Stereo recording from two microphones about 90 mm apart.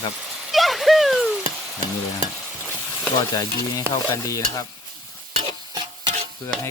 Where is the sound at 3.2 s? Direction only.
40° left (ahead or behind).